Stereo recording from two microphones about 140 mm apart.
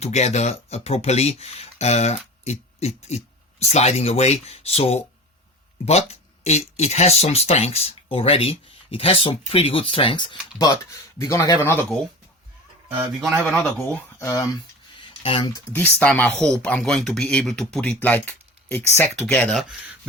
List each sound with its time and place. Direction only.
0.0 s speech: 50° left (ahead or behind)
11.2 s a man's voice: 25° left (ahead or behind)
13.2 s speech: centre (ahead or behind)
14.2 s a man's voice: 25° left (ahead or behind)
15.2 s speech: 40° left (ahead or behind)
15.7 s speech: 15° left (ahead or behind)